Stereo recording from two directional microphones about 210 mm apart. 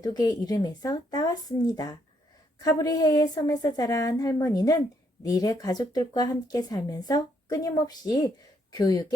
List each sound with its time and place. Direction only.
0.0 s speech: 20° left (ahead or behind)